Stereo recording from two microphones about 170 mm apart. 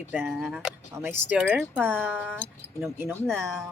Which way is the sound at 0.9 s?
15° right (ahead or behind).